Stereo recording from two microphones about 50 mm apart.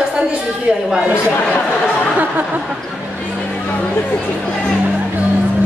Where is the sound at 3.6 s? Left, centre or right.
Left.